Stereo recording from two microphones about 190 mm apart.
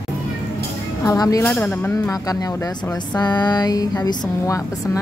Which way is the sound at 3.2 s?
20° left (ahead or behind).